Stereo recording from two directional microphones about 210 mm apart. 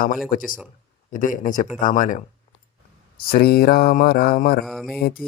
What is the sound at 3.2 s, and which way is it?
Speech, 45° left (ahead or behind).